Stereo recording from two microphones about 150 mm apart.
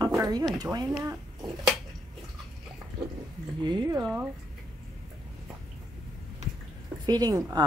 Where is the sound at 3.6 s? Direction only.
30° right (ahead or behind).